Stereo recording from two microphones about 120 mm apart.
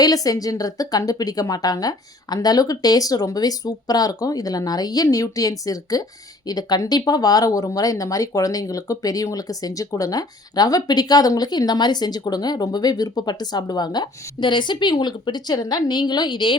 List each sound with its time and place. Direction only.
0.0 s speech: 30° left (ahead or behind)